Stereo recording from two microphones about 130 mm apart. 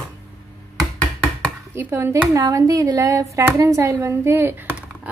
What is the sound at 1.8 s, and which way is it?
A woman's voice, 20° right (ahead or behind).